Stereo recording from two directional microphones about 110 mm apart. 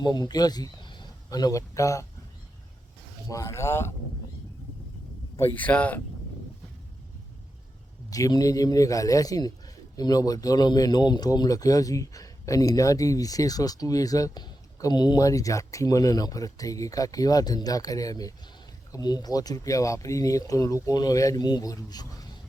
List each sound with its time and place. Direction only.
0.0 s speech: 40° left (ahead or behind)
3.2 s speech: 30° left (ahead or behind)
5.4 s speech: 15° left (ahead or behind)
8.1 s speech: 35° left (ahead or behind)